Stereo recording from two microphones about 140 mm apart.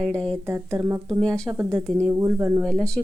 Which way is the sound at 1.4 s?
20° right (ahead or behind).